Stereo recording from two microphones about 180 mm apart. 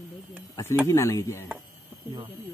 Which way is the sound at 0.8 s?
15° left (ahead or behind).